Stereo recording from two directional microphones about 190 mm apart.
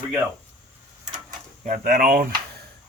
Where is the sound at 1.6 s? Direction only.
40° right (ahead or behind).